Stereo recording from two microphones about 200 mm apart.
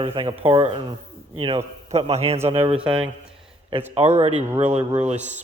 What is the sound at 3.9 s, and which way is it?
Speech, 30° right (ahead or behind).